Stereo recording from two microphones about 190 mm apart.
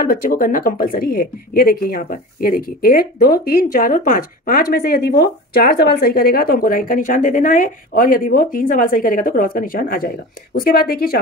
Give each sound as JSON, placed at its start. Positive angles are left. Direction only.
{"t": 0.0, "sound": "speech", "side_deg": 45}